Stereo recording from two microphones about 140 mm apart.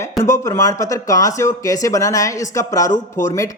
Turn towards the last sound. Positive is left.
turn(degrees=25)  # may be behind; listen again after turning